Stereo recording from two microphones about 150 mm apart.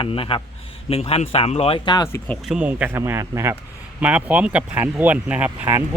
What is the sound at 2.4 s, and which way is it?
Speech, 10° right (ahead or behind).